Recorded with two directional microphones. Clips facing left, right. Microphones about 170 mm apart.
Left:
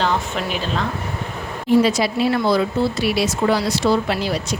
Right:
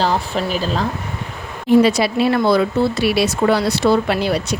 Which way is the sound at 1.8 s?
65° right (ahead or behind).